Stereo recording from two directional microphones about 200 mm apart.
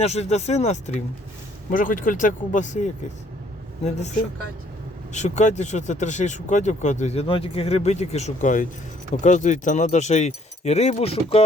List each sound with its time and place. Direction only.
0.0 s speech: 35° left (ahead or behind)
5.1 s speech: 35° left (ahead or behind)